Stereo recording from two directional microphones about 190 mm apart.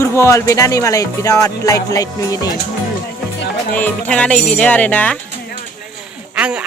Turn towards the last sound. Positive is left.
turn(degrees=-5)  # may be behind; listen again after turning